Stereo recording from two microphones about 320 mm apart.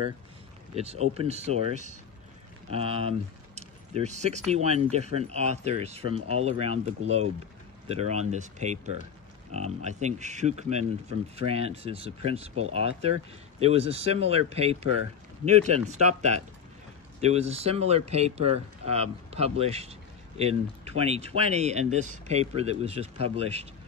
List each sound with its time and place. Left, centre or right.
0.7 s speech: centre